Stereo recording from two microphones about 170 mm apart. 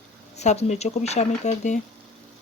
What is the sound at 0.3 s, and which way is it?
Speech, 40° left (ahead or behind).